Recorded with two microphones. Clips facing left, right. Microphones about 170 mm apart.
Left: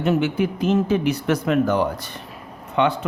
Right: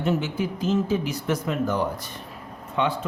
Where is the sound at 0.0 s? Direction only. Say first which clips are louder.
Left 5 dB; 65° left (ahead or behind).